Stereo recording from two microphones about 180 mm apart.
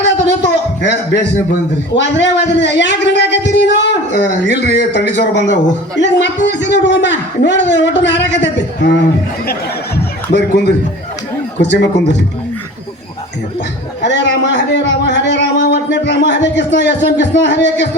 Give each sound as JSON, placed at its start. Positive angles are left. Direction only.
{"t": 0.4, "sound": "a sound", "side_deg": 80}
{"t": 2.0, "sound": "a man's voice", "side_deg": 80}
{"t": 10.3, "sound": "a man's voice", "side_deg": 70}
{"t": 14.0, "sound": "a man's voice", "side_deg": 75}